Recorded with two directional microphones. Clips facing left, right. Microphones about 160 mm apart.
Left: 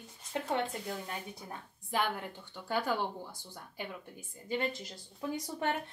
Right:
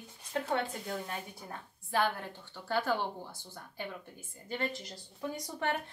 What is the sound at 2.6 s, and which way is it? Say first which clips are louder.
Speech: right 1 dB; 15° left (ahead or behind).